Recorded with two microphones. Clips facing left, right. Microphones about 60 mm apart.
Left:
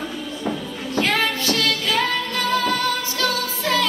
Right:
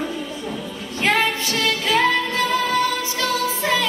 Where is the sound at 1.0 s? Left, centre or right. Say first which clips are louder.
Right 2 dB; right.